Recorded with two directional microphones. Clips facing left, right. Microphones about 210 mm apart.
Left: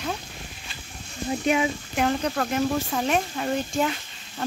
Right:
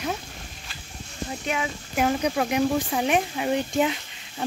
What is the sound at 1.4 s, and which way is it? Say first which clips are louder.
Speech: left 6 dB; 20° left (ahead or behind).